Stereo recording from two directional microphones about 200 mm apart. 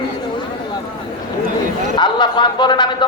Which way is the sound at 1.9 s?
20° left (ahead or behind).